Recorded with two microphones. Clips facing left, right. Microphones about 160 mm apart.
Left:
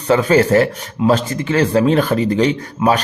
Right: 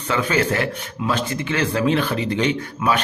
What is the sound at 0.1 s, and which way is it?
A man's voice, 35° left (ahead or behind).